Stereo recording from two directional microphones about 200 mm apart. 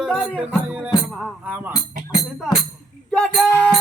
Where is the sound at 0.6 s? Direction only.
10° right (ahead or behind).